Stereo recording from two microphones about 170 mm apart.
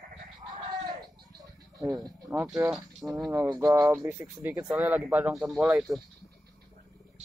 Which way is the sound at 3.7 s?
20° right (ahead or behind).